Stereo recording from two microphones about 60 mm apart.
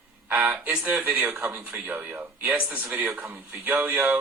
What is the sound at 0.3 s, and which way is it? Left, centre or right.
Speech, right.